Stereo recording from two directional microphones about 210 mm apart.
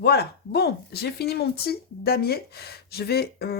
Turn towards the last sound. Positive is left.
turn(degrees=50)  # may be behind; listen again after turning